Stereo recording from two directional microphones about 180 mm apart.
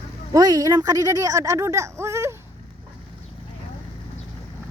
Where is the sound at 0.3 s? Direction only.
20° right (ahead or behind).